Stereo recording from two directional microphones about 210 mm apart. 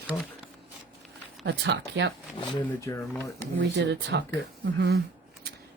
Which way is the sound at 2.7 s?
15° left (ahead or behind).